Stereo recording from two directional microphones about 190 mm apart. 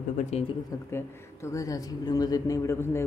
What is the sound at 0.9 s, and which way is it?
Speech, 15° left (ahead or behind).